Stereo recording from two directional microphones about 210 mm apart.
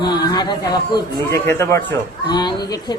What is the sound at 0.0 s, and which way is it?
A man's voice, 20° left (ahead or behind).